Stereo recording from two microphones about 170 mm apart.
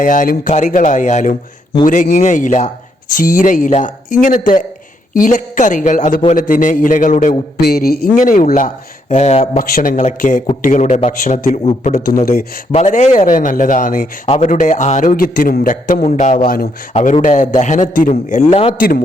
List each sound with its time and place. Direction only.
0.0 s a man's voice: 50° left (ahead or behind)
7.6 s a man's voice: 65° left (ahead or behind); by 11.9 s 40° left (ahead or behind)
11.9 s a man's voice: 60° left (ahead or behind)
12.7 s a man's voice: 45° left (ahead or behind)
14.3 s a man's voice: 40° left (ahead or behind)
18.8 s a man's voice: 60° left (ahead or behind)